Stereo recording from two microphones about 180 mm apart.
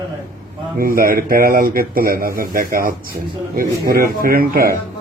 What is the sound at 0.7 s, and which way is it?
Speech, 55° right (ahead or behind).